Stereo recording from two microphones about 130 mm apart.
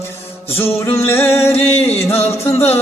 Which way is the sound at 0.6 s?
20° left (ahead or behind).